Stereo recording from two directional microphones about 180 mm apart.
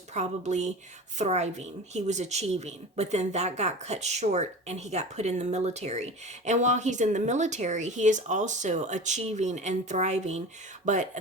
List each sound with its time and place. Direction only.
0.1 s speech: 40° right (ahead or behind)